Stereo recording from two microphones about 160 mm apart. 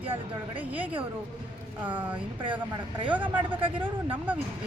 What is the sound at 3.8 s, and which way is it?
Speech, 10° right (ahead or behind).